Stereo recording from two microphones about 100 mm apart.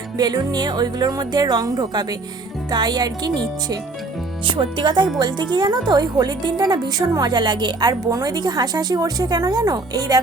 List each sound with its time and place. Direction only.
0.2 s speech: 40° right (ahead or behind)
4.4 s speech: 55° right (ahead or behind); by 10.2 s 40° right (ahead or behind)